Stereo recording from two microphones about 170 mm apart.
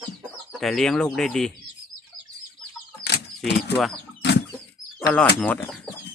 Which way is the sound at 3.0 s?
75° left (ahead or behind).